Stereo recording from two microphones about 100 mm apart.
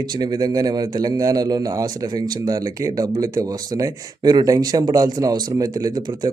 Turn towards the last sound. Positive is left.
turn(degrees=-40)  # may be behind; listen again after turning